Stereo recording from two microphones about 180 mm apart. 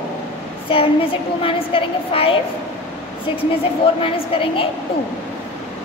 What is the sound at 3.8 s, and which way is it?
Speech, 30° left (ahead or behind).